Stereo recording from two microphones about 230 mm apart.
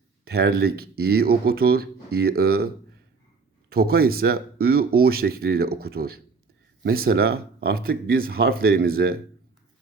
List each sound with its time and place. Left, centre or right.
0.3 s speech: right
3.7 s speech: right